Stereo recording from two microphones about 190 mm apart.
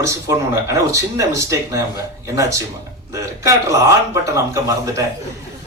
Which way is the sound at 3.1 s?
15° right (ahead or behind).